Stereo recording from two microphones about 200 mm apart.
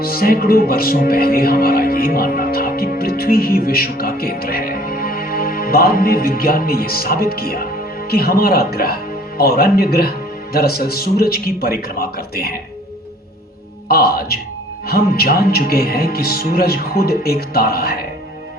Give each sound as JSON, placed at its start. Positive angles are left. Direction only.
{"t": 0.0, "sound": "speech", "side_deg": 50}
{"t": 13.8, "sound": "speech", "side_deg": 50}